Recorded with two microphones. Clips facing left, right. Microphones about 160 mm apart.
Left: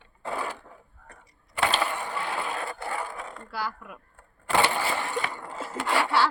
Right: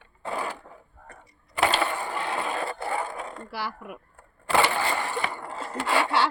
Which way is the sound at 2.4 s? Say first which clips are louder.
Right 3 dB; 25° right (ahead or behind).